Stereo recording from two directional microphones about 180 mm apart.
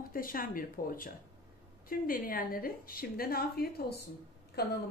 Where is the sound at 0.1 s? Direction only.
50° left (ahead or behind).